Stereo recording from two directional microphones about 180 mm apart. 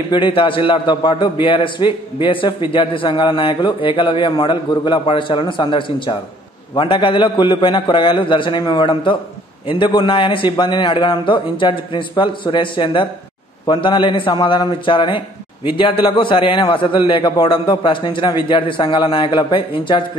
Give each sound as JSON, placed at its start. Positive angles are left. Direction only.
{"t": 0.1, "sound": "a man's voice", "side_deg": 25}